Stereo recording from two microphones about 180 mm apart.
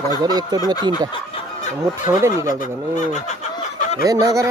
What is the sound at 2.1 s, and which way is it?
Speech, 15° right (ahead or behind).